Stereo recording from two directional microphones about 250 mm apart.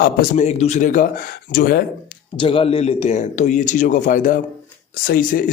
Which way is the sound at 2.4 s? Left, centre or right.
Left.